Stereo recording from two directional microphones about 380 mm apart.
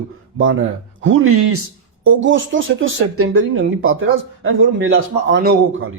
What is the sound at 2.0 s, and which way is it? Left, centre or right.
Speech, right.